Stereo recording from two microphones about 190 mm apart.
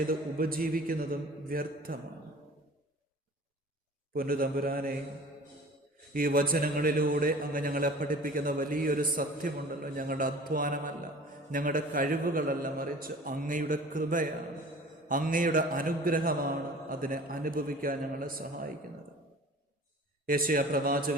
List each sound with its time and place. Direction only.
0.1 s a man's voice: 50° right (ahead or behind)
4.1 s a man's voice: 50° right (ahead or behind)
6.1 s a man's voice: 50° right (ahead or behind)
20.2 s a man's voice: 50° right (ahead or behind)